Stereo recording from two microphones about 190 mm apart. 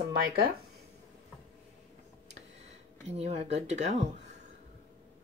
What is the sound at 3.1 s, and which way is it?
Speech, 35° right (ahead or behind).